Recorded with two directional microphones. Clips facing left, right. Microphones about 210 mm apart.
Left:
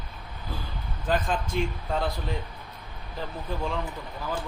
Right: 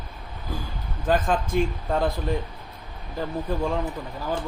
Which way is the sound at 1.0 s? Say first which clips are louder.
Right 4 dB; 45° right (ahead or behind).